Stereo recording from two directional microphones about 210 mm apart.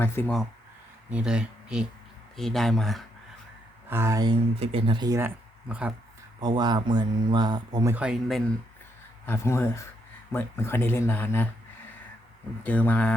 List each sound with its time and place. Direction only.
0.0 s speech: 10° left (ahead or behind)
1.1 s speech: 5° right (ahead or behind)
3.8 s speech: 10° right (ahead or behind)
4.6 s speech: 25° right (ahead or behind); by 5.9 s 5° right (ahead or behind)
6.4 s speech: 20° right (ahead or behind)
7.9 s speech: 5° right (ahead or behind)
9.2 s speech: 15° left (ahead or behind)
12.6 s speech: 5° left (ahead or behind)